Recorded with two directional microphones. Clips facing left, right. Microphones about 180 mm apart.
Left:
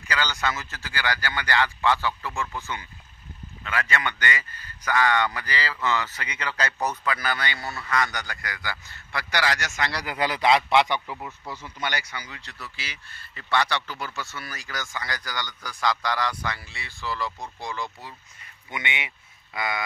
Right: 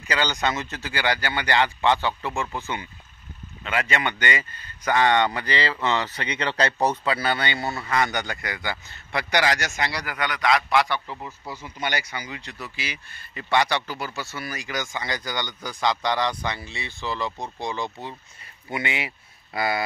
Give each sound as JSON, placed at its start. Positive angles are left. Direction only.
{"t": 0.1, "sound": "speech", "side_deg": -20}
{"t": 10.0, "sound": "a man's voice", "side_deg": 30}
{"t": 11.1, "sound": "speech", "side_deg": 5}
{"t": 11.4, "sound": "speech", "side_deg": -15}
{"t": 18.7, "sound": "speech", "side_deg": -35}